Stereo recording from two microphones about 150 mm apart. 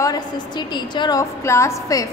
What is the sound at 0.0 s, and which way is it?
A woman's voice, 25° left (ahead or behind).